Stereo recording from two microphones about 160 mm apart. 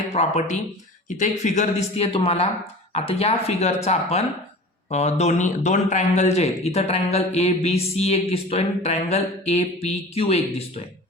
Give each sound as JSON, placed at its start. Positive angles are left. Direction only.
{"t": 0.1, "sound": "speech", "side_deg": 45}